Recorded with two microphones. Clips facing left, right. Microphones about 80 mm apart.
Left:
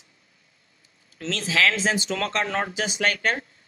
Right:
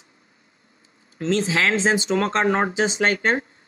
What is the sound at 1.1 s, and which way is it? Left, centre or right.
Speech, right.